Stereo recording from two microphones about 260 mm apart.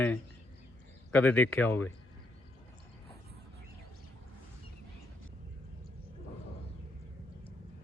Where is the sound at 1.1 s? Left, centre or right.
Centre.